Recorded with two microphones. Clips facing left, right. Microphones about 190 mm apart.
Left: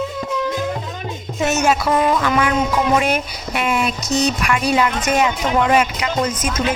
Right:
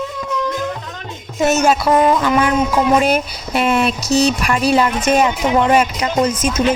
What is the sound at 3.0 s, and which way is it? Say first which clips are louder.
Speech: right 3 dB; 35° right (ahead or behind).